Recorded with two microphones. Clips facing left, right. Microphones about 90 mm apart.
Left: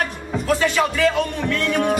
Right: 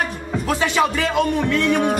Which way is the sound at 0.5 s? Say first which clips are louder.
Even; 15° right (ahead or behind).